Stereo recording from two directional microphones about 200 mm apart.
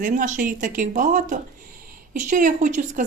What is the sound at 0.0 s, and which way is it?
A woman's voice, 40° right (ahead or behind).